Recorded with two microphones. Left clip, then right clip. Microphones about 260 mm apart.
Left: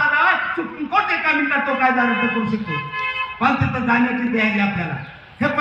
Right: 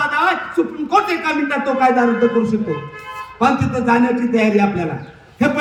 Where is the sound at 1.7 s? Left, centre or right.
Right.